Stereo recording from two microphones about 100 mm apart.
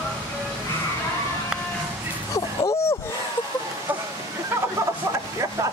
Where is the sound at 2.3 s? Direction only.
30° left (ahead or behind).